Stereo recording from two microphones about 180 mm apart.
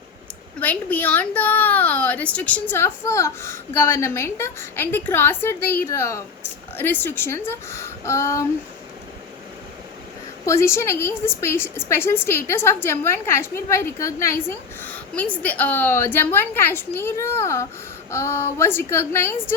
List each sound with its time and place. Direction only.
0.6 s speech: 10° left (ahead or behind)
10.4 s speech: 15° left (ahead or behind)